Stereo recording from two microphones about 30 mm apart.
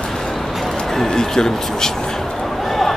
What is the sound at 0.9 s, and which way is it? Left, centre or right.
Speech, centre.